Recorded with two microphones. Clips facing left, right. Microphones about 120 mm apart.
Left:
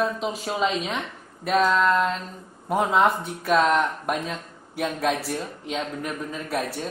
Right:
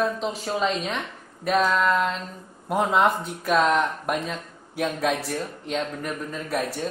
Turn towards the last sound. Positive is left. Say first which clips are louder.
# right 1 dB
turn(degrees=5)  # may be behind; listen again after turning